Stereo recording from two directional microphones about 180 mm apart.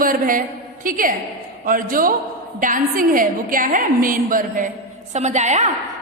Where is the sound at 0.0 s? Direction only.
50° right (ahead or behind).